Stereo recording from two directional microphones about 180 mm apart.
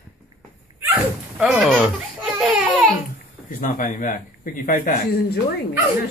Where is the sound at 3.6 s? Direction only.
50° left (ahead or behind).